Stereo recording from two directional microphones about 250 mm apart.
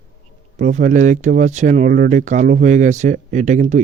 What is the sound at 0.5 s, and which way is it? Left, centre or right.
Speech, right.